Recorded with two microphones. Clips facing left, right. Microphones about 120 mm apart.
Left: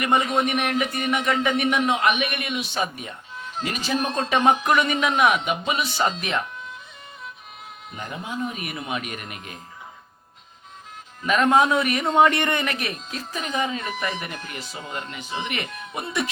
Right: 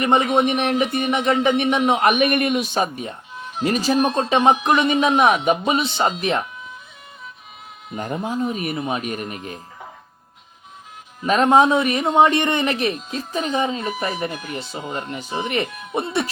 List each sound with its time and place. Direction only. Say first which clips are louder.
0.0 s speech: right 4 dB; 25° right (ahead or behind)
1.9 s speech: right 5 dB; 45° right (ahead or behind)
3.9 s speech: right 1 dB; 15° right (ahead or behind)
5.0 s speech: right 5 dB; 35° right (ahead or behind)
5.8 s speech: right 3 dB; 25° right (ahead or behind)
7.9 s speech: right 7 dB; 40° right (ahead or behind)
11.7 s speech: right 3 dB; 25° right (ahead or behind)
14.3 s speech: right 6 dB; 15° right (ahead or behind)
14.5 s speech: right 5 dB; 25° right (ahead or behind)
15.7 s music: right 4 dB; centre (ahead or behind)
16.0 s speech: right 5 dB; 30° right (ahead or behind)